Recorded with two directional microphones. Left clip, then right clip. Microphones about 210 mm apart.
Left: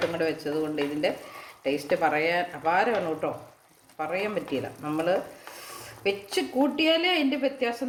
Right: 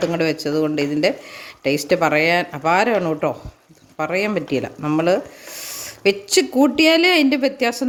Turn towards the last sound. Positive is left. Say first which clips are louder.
# right 8 dB
turn(degrees=-55)  # may be behind; listen again after turning